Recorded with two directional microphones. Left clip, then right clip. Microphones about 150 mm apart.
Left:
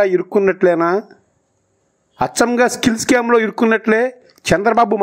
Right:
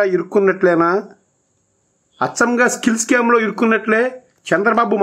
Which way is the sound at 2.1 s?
35° left (ahead or behind).